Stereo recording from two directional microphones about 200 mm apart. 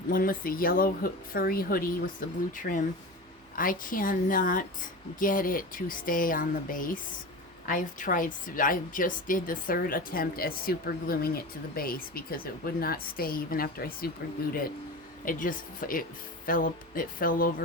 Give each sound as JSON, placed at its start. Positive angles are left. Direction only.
{"t": 0.1, "sound": "a woman's voice", "side_deg": 45}
{"t": 15.2, "sound": "a woman's voice", "side_deg": 45}